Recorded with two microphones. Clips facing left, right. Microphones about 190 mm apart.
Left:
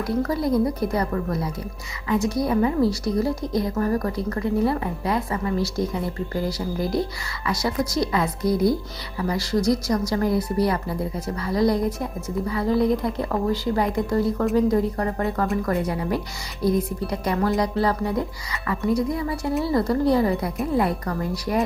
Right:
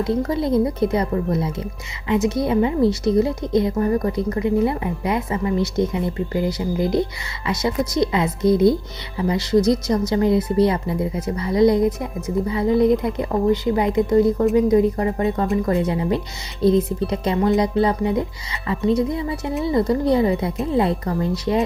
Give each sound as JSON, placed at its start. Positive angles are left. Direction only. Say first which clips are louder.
{"t": 0.0, "sound": "a woman's voice", "louder": "right 3 dB", "side_deg": -25}